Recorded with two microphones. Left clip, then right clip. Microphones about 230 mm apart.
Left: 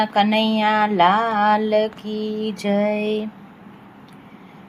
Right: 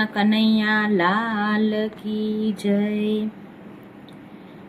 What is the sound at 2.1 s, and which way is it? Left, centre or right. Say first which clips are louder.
Mantra: left 1 dB; left.